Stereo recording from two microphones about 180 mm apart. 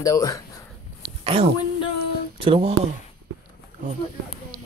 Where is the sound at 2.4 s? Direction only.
30° right (ahead or behind).